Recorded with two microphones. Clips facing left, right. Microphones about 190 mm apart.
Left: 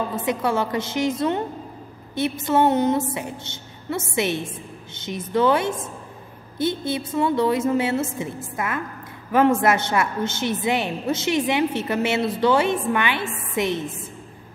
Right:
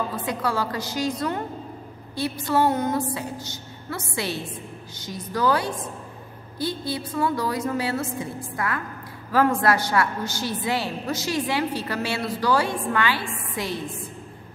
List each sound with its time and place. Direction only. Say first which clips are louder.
0.1 s a woman's voice: left 4 dB; 25° left (ahead or behind)